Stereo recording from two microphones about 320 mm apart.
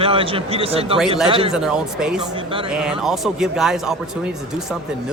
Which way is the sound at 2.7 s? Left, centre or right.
Centre.